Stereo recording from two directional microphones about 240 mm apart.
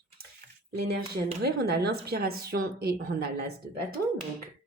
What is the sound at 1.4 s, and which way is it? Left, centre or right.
Speech, right.